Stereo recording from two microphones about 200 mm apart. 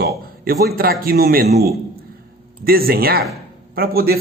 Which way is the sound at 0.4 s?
50° right (ahead or behind).